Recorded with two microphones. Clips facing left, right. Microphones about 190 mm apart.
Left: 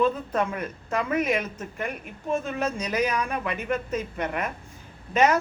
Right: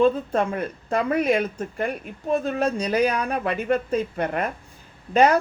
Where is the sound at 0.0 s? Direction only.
30° right (ahead or behind).